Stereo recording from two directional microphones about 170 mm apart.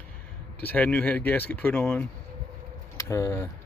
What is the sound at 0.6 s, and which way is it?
Speech, 10° left (ahead or behind).